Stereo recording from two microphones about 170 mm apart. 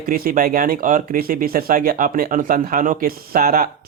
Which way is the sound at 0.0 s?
55° right (ahead or behind).